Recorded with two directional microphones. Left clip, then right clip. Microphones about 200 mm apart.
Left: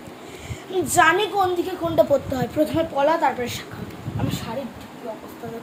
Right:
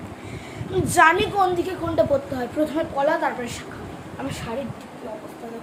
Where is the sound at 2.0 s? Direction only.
25° left (ahead or behind).